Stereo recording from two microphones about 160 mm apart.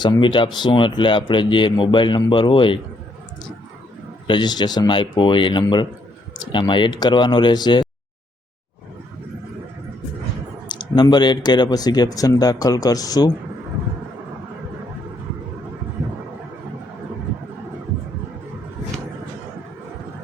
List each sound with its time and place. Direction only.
0.0 s speech: 30° left (ahead or behind)
4.3 s speech: 25° left (ahead or behind)
10.7 s speech: 25° left (ahead or behind)